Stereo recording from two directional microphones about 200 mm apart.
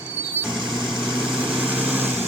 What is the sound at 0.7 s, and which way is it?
Vehicle, centre (ahead or behind).